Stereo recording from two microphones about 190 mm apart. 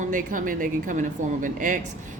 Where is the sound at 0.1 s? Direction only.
45° right (ahead or behind).